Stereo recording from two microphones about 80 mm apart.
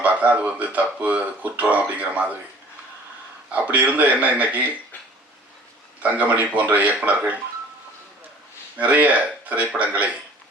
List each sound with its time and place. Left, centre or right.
0.0 s speech: centre
3.5 s a man's voice: centre
6.0 s speech: centre
8.8 s a man's voice: centre